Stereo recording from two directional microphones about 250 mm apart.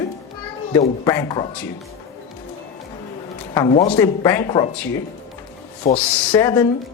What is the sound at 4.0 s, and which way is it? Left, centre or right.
Speech, centre.